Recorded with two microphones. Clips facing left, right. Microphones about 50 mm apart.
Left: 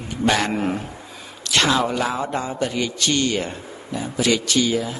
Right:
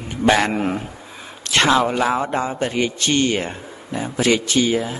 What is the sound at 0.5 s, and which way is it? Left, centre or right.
Speech, centre.